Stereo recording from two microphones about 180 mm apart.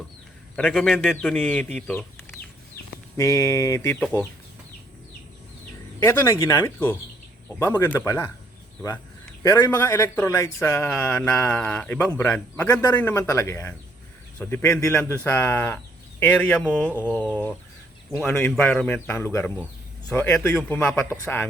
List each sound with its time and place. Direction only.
0.7 s speech: centre (ahead or behind); by 3.9 s 20° left (ahead or behind)
6.0 s speech: 15° left (ahead or behind)
9.4 s speech: 20° left (ahead or behind)
12.7 s speech: 20° left (ahead or behind)